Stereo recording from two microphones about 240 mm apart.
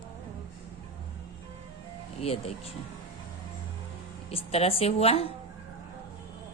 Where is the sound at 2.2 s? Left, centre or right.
Left.